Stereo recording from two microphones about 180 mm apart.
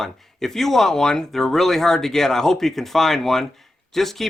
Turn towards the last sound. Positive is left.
turn(degrees=0)  # may be behind; listen again after turning